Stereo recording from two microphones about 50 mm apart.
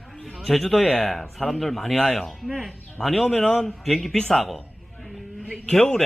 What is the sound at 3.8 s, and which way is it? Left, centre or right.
Speech, centre.